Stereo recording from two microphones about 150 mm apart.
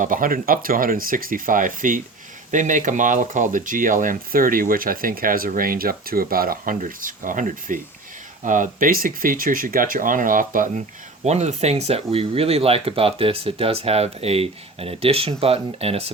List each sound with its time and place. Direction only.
0.0 s speech: 65° right (ahead or behind)
11.2 s speech: 50° right (ahead or behind)